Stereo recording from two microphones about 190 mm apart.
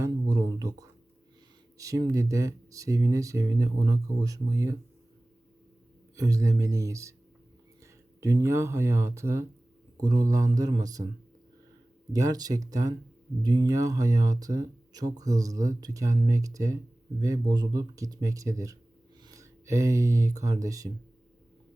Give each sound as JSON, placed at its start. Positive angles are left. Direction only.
{"t": 0.0, "sound": "a sound", "side_deg": -20}
{"t": 1.8, "sound": "speech", "side_deg": -15}
{"t": 6.1, "sound": "speech", "side_deg": -15}
{"t": 8.2, "sound": "speech", "side_deg": -15}
{"t": 12.1, "sound": "speech", "side_deg": -20}